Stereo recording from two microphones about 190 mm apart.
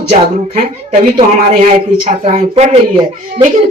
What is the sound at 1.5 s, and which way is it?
Speech, 40° right (ahead or behind).